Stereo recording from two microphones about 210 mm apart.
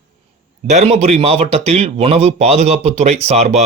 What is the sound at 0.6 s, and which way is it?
Speech, 30° right (ahead or behind).